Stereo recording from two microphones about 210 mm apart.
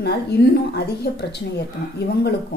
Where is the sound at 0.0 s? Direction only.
50° left (ahead or behind).